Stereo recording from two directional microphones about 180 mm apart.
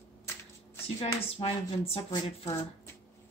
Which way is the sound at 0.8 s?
30° left (ahead or behind).